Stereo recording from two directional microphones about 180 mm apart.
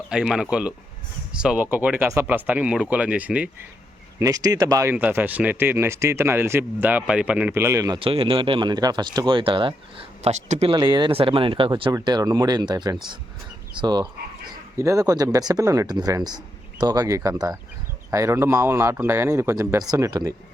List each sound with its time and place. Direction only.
0.1 s speech: 5° right (ahead or behind)
4.2 s speech: 20° right (ahead or behind)
7.9 s speech: 30° right (ahead or behind)
10.8 s speech: 25° right (ahead or behind)